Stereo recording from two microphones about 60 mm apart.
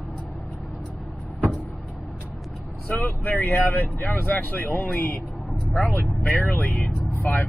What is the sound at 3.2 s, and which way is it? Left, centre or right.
Speech, left.